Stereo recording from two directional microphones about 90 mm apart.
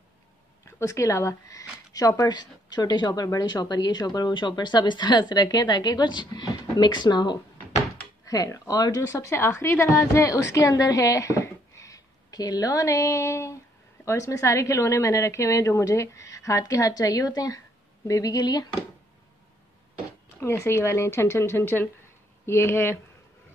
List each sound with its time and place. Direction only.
0.7 s speech: 35° left (ahead or behind)
20.5 s speech: 30° left (ahead or behind)